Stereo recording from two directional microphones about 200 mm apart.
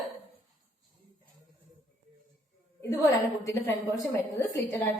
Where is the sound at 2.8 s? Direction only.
15° left (ahead or behind).